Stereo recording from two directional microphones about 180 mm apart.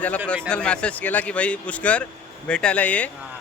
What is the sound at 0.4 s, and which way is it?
Speech, 5° left (ahead or behind).